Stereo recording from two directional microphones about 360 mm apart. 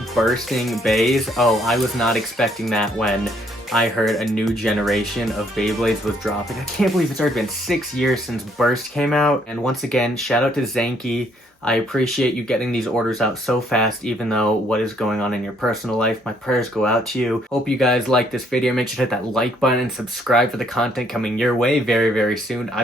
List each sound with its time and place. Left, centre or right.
0.1 s speech: centre